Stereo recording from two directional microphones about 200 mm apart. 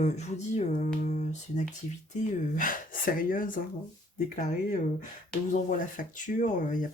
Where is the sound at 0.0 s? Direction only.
35° left (ahead or behind).